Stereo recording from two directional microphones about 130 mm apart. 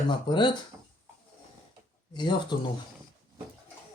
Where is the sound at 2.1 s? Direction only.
35° left (ahead or behind).